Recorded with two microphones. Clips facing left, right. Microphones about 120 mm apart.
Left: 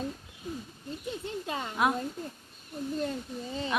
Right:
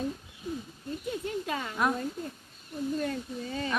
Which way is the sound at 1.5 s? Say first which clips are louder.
Right 1 dB; 25° left (ahead or behind).